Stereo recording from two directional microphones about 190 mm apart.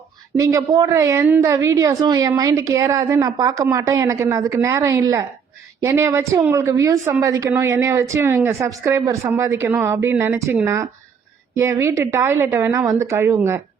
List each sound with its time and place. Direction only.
0.3 s a woman's voice: 20° right (ahead or behind)